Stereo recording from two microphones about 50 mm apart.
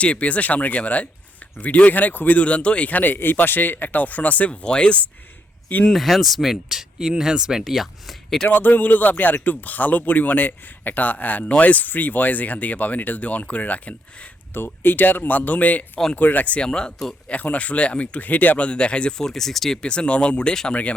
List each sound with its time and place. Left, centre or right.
0.0 s speech: left
2.4 s speech: left
4.6 s speech: centre
5.6 s speech: left
5.9 s speech: centre
8.4 s speech: left
14.5 s speech: left
16.6 s speech: centre
17.2 s speech: left
19.2 s speech: centre
19.8 s speech: centre